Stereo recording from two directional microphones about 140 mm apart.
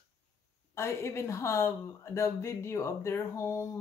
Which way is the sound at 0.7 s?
20° left (ahead or behind).